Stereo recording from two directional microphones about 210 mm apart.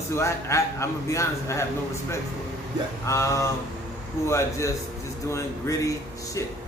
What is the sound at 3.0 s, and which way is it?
A man's voice, 15° left (ahead or behind).